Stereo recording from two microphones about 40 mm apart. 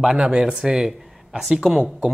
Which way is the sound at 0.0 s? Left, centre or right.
Centre.